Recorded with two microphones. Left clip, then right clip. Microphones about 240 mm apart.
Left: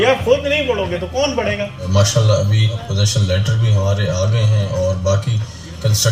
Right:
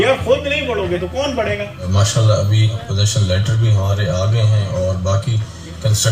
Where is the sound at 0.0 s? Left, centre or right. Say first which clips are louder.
Left 1 dB; left.